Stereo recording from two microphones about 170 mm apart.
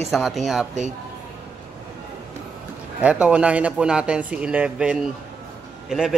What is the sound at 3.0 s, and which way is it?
A man's voice, 5° right (ahead or behind).